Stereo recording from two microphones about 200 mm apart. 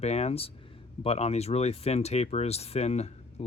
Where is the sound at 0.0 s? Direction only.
35° left (ahead or behind).